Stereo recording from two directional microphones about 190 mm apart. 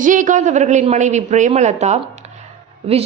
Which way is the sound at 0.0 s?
45° right (ahead or behind).